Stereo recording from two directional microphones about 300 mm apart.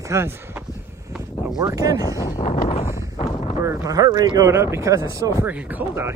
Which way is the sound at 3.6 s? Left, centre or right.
Centre.